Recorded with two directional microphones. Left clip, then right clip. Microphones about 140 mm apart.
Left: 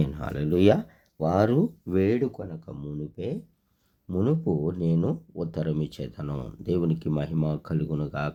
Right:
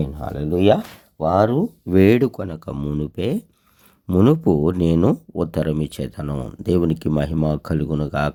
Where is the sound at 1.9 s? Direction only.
80° right.